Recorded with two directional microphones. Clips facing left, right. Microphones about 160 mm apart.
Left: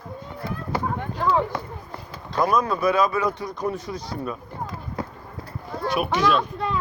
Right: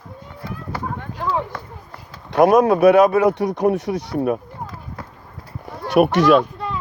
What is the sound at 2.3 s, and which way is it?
Speech, 75° right (ahead or behind).